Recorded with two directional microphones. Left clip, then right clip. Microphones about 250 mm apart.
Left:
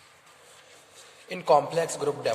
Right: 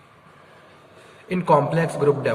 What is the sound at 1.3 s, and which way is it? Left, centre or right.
A man's voice, centre.